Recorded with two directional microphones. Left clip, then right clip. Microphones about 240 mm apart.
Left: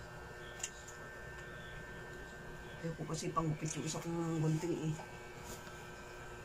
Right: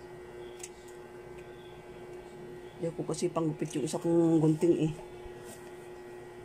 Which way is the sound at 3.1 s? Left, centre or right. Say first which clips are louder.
Right 5 dB; right.